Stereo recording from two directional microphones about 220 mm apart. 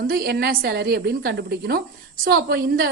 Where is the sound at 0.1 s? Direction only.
45° right (ahead or behind).